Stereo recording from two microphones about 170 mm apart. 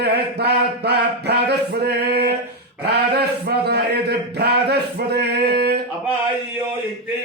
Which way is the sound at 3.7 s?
75° right (ahead or behind).